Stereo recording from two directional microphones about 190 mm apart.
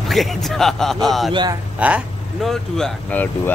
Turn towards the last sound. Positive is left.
turn(degrees=10)  # may be behind; listen again after turning